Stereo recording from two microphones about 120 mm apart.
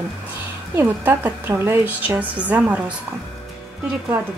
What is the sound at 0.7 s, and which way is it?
A woman's voice, 15° right (ahead or behind).